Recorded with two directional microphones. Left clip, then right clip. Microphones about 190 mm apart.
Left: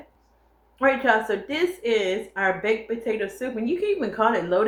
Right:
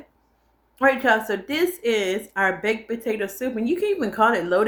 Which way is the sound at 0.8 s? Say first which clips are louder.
Right 1 dB; 45° right (ahead or behind).